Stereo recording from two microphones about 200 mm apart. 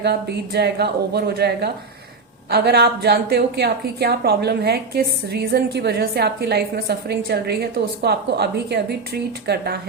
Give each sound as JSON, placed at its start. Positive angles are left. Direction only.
{"t": 0.0, "sound": "a woman's voice", "side_deg": -55}